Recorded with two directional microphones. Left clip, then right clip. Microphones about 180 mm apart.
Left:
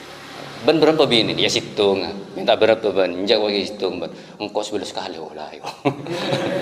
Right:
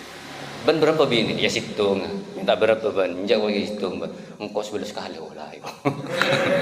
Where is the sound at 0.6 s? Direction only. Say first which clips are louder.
Left 3 dB; 25° left (ahead or behind).